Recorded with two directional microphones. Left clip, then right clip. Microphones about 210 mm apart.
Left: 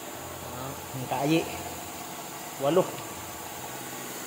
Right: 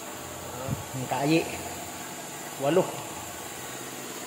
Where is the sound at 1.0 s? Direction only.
15° right (ahead or behind).